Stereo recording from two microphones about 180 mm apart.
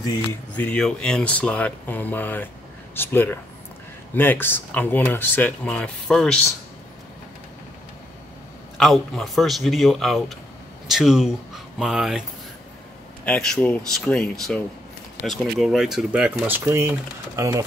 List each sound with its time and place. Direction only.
0.6 s speech: 5° left (ahead or behind)
8.7 s speech: 5° left (ahead or behind)
13.2 s speech: 5° left (ahead or behind); by 17.6 s 15° right (ahead or behind)